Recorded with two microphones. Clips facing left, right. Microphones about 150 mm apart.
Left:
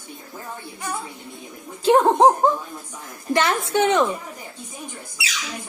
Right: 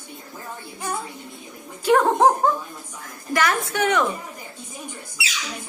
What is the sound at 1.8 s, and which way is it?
A woman's voice, 25° left (ahead or behind).